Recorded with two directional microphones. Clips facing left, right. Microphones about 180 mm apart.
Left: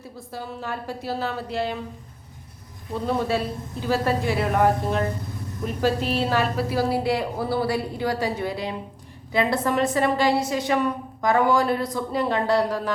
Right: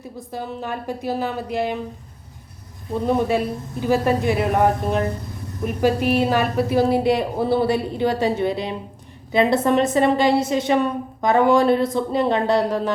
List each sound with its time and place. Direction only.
0.2 s a woman's voice: 20° right (ahead or behind)
3.0 s a woman's voice: 20° right (ahead or behind)